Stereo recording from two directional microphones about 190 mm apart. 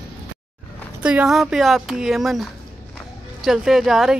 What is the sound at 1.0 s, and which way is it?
Speech, 5° right (ahead or behind).